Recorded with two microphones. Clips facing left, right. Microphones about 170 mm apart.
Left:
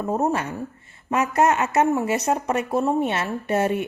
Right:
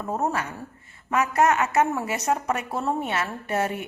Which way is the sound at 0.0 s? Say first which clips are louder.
Left 4 dB; 20° left (ahead or behind).